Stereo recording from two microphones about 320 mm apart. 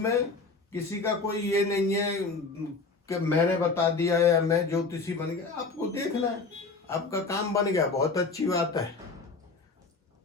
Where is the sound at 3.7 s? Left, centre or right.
Centre.